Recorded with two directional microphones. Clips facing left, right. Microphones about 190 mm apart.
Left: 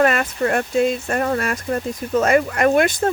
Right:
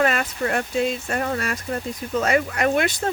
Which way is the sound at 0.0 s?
50° left (ahead or behind).